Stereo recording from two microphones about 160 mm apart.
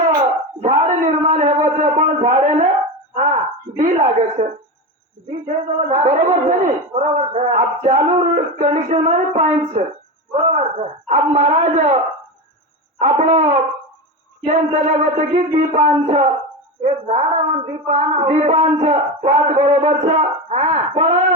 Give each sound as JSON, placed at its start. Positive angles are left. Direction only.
{"t": 0.2, "sound": "a sound", "side_deg": -50}
{"t": 3.8, "sound": "speech", "side_deg": -50}
{"t": 6.9, "sound": "speech", "side_deg": -45}
{"t": 13.0, "sound": "speech", "side_deg": -45}